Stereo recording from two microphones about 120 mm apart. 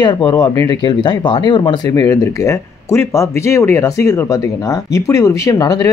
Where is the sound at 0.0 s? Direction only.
35° left (ahead or behind).